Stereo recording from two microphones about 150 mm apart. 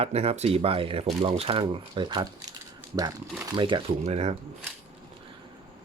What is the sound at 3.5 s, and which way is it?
Speech, 35° right (ahead or behind).